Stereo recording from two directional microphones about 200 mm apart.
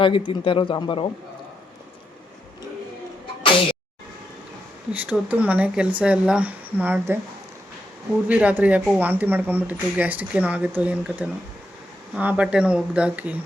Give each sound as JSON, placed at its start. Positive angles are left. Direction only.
{"t": 0.0, "sound": "a man's voice", "side_deg": 25}
{"t": 4.9, "sound": "speech", "side_deg": -5}
{"t": 8.3, "sound": "speech", "side_deg": -5}